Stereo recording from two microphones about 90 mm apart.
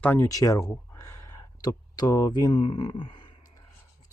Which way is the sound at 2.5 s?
75° left (ahead or behind).